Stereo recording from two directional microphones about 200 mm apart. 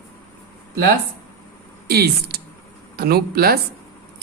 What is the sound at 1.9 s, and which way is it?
Speech, 50° right (ahead or behind).